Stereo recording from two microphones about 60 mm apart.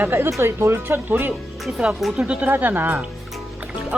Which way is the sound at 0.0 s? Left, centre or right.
Right.